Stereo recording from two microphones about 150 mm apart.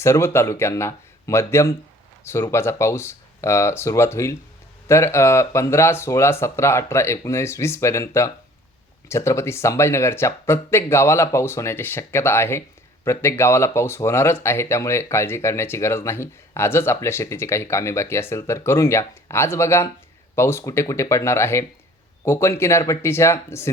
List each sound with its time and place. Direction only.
0.0 s speech: 15° left (ahead or behind)